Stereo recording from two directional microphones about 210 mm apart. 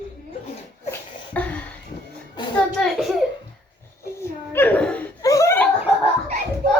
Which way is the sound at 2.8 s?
Centre (ahead or behind).